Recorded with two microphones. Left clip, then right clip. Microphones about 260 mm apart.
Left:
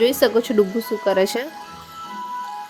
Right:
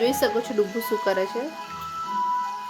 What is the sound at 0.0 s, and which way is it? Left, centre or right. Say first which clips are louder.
Speech: left 6 dB; left.